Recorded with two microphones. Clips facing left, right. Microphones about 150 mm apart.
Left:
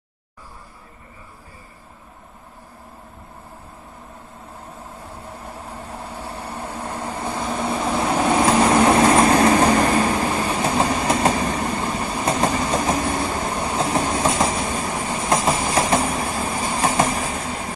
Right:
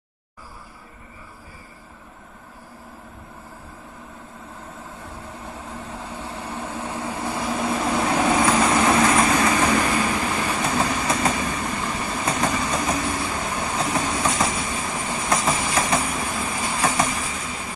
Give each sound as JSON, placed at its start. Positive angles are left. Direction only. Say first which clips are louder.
{"t": 6.9, "sound": "vehicle", "louder": "left 1 dB", "side_deg": -10}
{"t": 8.0, "sound": "vehicle", "louder": "left 2 dB", "side_deg": 15}
{"t": 8.4, "sound": "vehicle", "louder": "left 3 dB", "side_deg": 30}
{"t": 9.4, "sound": "train", "louder": "left 5 dB", "side_deg": 35}